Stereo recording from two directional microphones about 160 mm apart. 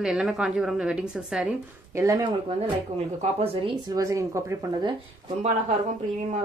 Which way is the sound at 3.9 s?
20° right (ahead or behind).